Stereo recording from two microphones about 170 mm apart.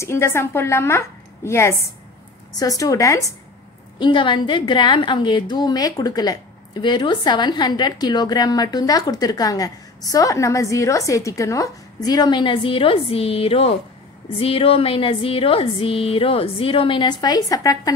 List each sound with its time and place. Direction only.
0.0 s a woman's voice: 15° left (ahead or behind)